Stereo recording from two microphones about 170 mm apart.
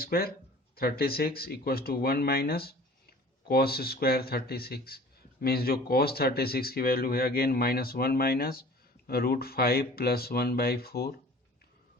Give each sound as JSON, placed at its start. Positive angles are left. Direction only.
{"t": 0.0, "sound": "speech", "side_deg": 60}